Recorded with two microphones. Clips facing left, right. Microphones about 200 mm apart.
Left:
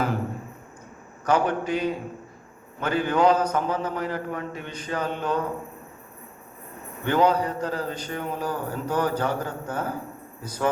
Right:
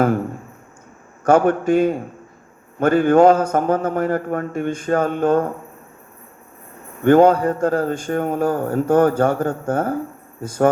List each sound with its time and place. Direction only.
1.2 s a man's voice: 50° right (ahead or behind)
7.0 s a man's voice: 50° right (ahead or behind)